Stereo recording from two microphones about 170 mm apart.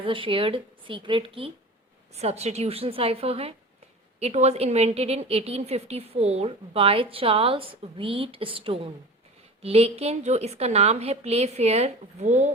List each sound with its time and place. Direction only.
0.0 s a woman's voice: 30° right (ahead or behind)